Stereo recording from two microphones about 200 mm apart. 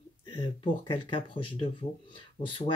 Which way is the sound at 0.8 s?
25° left (ahead or behind).